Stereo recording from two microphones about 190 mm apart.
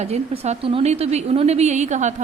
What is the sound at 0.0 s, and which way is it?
A woman's voice, 35° right (ahead or behind).